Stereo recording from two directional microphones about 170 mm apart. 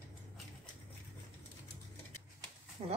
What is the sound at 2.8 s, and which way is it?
Livestock, 30° right (ahead or behind).